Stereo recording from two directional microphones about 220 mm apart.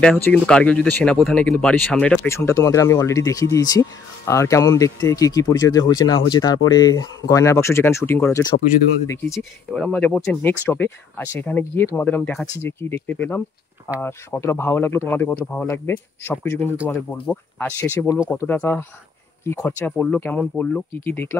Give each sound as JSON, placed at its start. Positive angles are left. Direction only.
{"t": 0.0, "sound": "speech", "side_deg": 5}
{"t": 9.4, "sound": "speech", "side_deg": 5}